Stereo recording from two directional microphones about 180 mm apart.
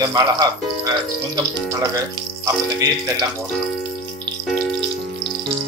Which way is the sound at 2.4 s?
20° right (ahead or behind).